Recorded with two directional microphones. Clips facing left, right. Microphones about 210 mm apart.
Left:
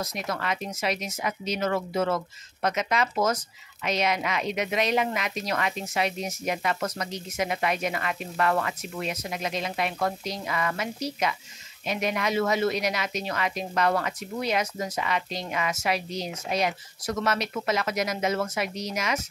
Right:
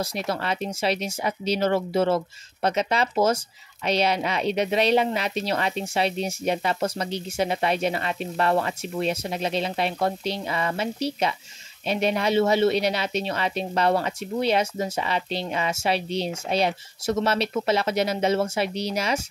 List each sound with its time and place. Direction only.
0.0 s speech: 30° right (ahead or behind)